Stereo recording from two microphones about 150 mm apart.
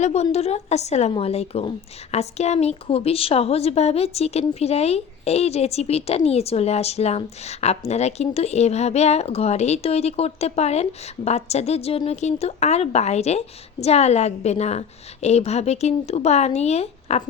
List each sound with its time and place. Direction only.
0.0 s a woman's voice: 45° left (ahead or behind)